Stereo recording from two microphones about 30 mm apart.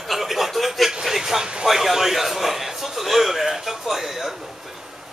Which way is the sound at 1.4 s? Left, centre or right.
Right.